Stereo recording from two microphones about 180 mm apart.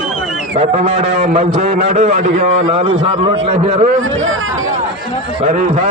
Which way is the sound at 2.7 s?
30° right (ahead or behind).